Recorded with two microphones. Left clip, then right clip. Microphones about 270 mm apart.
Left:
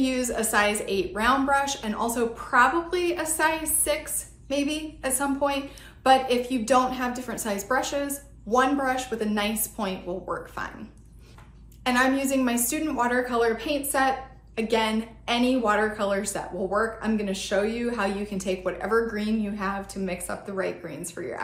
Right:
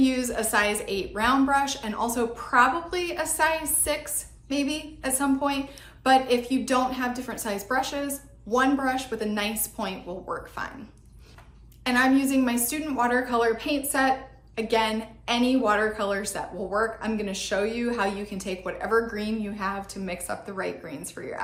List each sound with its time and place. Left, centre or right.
0.0 s a woman's voice: centre
11.8 s a woman's voice: centre